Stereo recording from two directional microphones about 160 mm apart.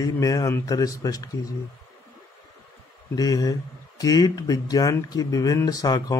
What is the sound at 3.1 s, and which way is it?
Speech, 25° left (ahead or behind).